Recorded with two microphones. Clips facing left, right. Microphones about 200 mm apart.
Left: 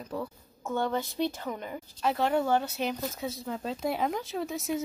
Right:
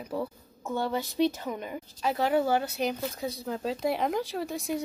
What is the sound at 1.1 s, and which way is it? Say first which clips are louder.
Speech: right 4 dB; 20° right (ahead or behind).